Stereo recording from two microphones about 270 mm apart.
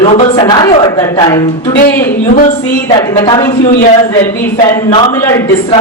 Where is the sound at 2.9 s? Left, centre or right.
Centre.